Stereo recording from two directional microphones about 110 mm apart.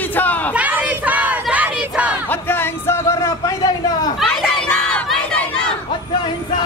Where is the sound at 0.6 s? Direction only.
15° right (ahead or behind).